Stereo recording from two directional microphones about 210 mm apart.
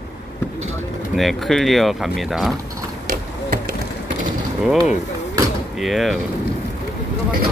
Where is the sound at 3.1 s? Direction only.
40° right (ahead or behind).